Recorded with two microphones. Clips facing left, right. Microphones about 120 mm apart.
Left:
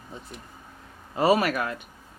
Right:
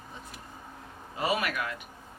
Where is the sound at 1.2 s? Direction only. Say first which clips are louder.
Left 8 dB; 40° left (ahead or behind).